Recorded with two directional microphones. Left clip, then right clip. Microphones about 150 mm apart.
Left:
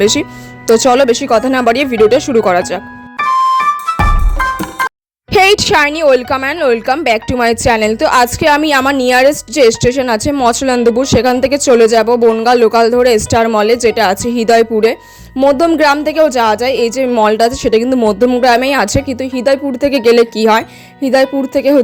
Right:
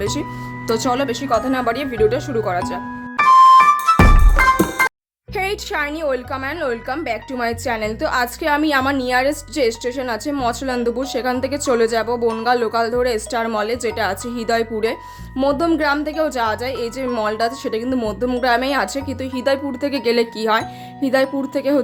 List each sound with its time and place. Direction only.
0.0 s a woman's voice: 60° left (ahead or behind)
3.2 s music: centre (ahead or behind)
5.3 s a woman's voice: 65° left (ahead or behind); by 21.8 s 45° left (ahead or behind)